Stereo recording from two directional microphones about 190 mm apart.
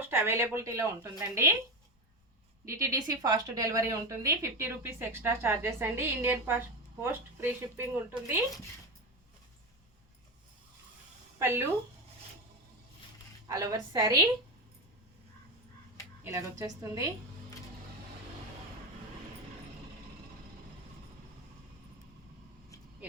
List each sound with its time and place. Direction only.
0.1 s a woman's voice: 10° right (ahead or behind)
2.6 s a woman's voice: 15° right (ahead or behind)
11.3 s speech: 15° right (ahead or behind)
13.5 s a woman's voice: 20° right (ahead or behind)
16.2 s a woman's voice: 15° right (ahead or behind)